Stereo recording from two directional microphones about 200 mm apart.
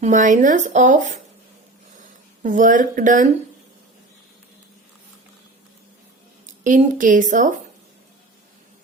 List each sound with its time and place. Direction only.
0.0 s speech: 40° right (ahead or behind)
6.4 s a woman's voice: 40° right (ahead or behind)